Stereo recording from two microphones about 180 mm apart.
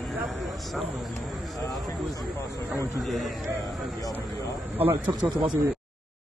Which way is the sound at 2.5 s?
20° right (ahead or behind).